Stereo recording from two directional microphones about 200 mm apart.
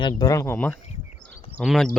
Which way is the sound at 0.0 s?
20° left (ahead or behind).